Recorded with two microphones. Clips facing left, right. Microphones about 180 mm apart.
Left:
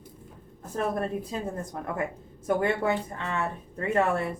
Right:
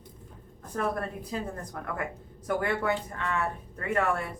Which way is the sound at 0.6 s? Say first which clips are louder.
Left 2 dB; 25° left (ahead or behind).